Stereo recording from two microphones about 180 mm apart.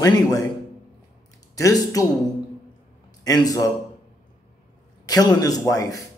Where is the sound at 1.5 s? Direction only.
20° left (ahead or behind).